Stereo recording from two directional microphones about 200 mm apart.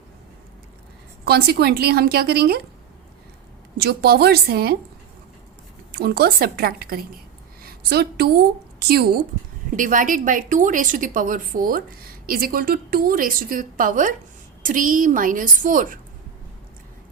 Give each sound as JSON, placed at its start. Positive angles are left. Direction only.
{"t": 1.2, "sound": "a woman's voice", "side_deg": -50}
{"t": 3.8, "sound": "a woman's voice", "side_deg": -55}
{"t": 5.9, "sound": "a woman's voice", "side_deg": -50}
{"t": 7.6, "sound": "a sound", "side_deg": -50}
{"t": 8.8, "sound": "a woman's voice", "side_deg": -50}